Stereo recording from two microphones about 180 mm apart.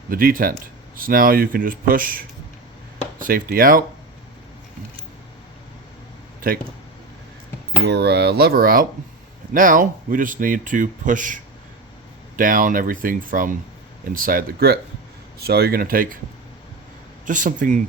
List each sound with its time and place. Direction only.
0.1 s speech: 50° right (ahead or behind)
7.9 s speech: 65° right (ahead or behind)
17.2 s speech: 45° right (ahead or behind)